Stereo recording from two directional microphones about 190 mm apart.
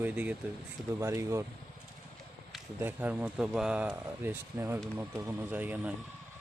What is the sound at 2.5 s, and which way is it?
Speech, 10° right (ahead or behind).